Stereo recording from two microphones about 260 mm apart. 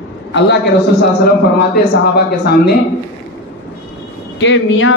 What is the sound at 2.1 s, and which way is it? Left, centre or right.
Speech, left.